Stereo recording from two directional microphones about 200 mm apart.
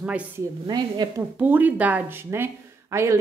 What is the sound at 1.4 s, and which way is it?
A woman's voice, 10° right (ahead or behind).